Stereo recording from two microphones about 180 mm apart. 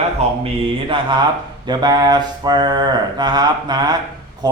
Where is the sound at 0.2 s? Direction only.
35° right (ahead or behind).